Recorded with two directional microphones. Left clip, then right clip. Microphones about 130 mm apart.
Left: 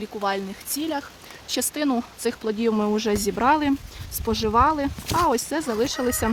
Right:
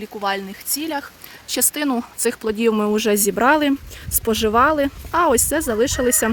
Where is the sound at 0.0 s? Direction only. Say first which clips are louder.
Right 3 dB; 15° right (ahead or behind).